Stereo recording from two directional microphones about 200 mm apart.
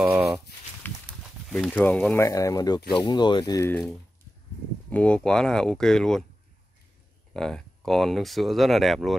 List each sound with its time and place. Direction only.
0.0 s speech: 5° right (ahead or behind)
0.8 s a sound: 10° left (ahead or behind)
1.5 s speech: 5° left (ahead or behind)
4.8 s speech: 5° left (ahead or behind)
7.3 s speech: 5° left (ahead or behind)